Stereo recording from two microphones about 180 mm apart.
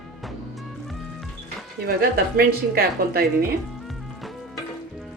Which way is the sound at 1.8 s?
55° right (ahead or behind).